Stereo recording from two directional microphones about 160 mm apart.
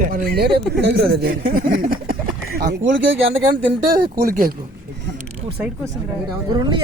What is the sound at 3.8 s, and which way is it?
Speech, 75° right (ahead or behind).